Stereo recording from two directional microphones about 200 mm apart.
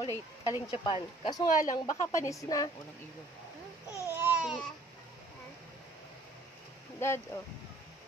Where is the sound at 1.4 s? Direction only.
40° left (ahead or behind).